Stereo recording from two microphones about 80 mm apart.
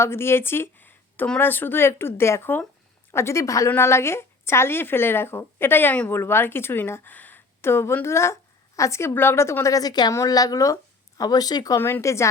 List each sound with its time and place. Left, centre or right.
0.0 s a woman's voice: left
11.8 s a woman's voice: left